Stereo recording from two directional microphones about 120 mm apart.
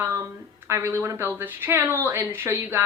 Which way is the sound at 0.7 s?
20° right (ahead or behind).